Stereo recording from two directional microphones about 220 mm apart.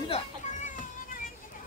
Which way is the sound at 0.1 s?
35° left (ahead or behind).